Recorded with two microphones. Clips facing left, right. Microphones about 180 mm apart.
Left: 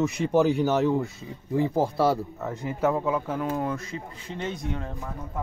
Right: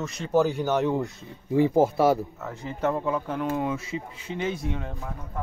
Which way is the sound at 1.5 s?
15° right (ahead or behind).